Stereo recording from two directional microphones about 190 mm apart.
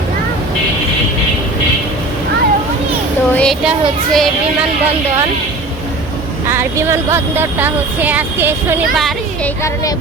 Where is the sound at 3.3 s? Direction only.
Centre (ahead or behind).